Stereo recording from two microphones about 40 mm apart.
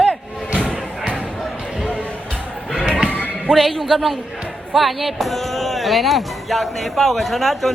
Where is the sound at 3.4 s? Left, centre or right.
Centre.